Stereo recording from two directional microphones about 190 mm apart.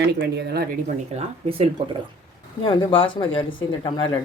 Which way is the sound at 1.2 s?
30° right (ahead or behind).